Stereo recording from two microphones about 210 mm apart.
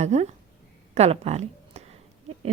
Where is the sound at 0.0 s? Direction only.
30° right (ahead or behind).